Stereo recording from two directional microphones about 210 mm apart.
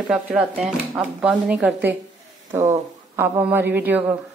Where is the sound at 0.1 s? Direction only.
5° right (ahead or behind).